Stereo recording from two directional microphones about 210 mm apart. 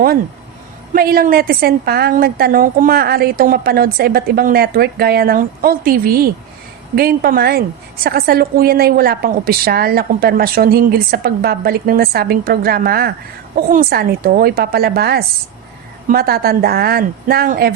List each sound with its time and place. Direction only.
0.9 s a woman's voice: 45° right (ahead or behind)